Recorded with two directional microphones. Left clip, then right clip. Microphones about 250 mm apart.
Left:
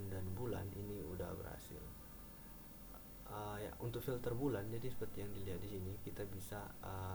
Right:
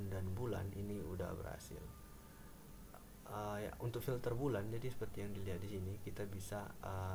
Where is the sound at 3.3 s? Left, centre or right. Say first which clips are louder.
Right 3 dB; centre.